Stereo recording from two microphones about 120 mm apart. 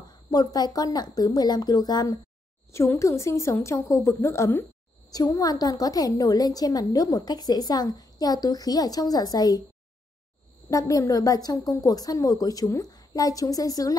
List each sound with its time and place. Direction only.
0.3 s a woman's voice: 35° left (ahead or behind)
10.7 s a woman's voice: 30° left (ahead or behind)